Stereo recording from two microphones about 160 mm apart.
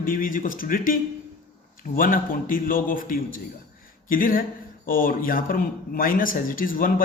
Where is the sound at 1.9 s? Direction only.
60° left (ahead or behind).